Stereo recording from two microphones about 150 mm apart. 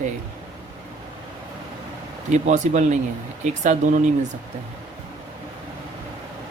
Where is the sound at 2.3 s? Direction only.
50° right (ahead or behind).